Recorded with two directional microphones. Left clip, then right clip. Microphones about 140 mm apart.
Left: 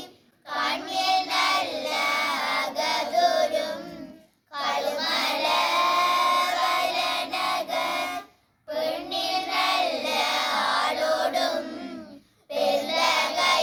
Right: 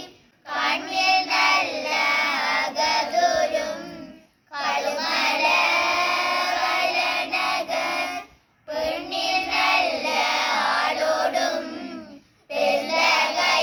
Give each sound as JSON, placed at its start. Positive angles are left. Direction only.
{"t": 0.4, "sound": "child singing", "side_deg": 25}
{"t": 7.9, "sound": "a sound", "side_deg": 25}
{"t": 8.7, "sound": "child singing", "side_deg": 5}
{"t": 9.0, "sound": "child singing", "side_deg": 30}
{"t": 12.9, "sound": "child singing", "side_deg": 25}